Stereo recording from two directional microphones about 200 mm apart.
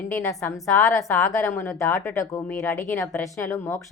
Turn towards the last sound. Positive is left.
turn(degrees=10)  # may be behind; listen again after turning